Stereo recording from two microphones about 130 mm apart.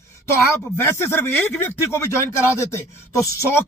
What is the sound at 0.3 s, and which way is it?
Speech, 20° left (ahead or behind).